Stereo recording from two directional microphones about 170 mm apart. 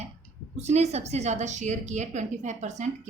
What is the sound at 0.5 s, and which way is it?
A woman's voice, 40° right (ahead or behind).